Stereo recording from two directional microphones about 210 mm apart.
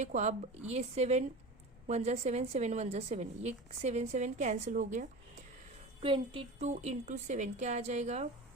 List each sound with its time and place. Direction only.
0.0 s a woman's voice: 35° right (ahead or behind)
6.0 s a woman's voice: 25° right (ahead or behind)